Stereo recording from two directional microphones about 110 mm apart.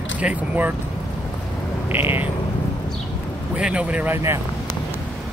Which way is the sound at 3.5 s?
10° right (ahead or behind).